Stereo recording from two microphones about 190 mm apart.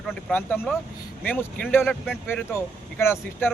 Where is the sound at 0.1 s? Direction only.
5° left (ahead or behind).